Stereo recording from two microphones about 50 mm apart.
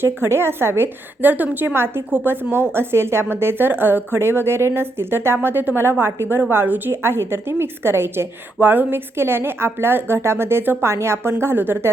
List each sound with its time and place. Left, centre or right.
0.0 s a woman's voice: right
1.2 s a woman's voice: right
2.2 s a woman's voice: right
6.9 s a woman's voice: right
8.6 s a woman's voice: right
9.1 s a woman's voice: right